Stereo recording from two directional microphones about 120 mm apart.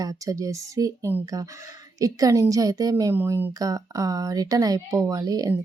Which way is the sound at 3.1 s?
15° right (ahead or behind).